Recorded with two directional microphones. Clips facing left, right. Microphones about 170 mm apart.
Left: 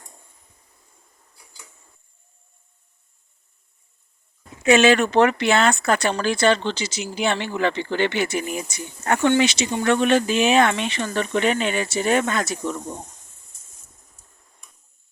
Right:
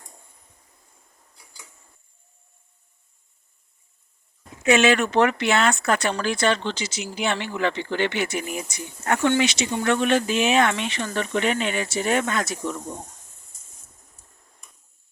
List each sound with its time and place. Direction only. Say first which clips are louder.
4.6 s speech: left 3 dB; 35° left (ahead or behind)